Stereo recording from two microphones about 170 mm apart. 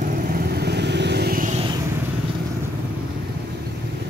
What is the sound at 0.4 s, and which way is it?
Vehicle, 70° right (ahead or behind).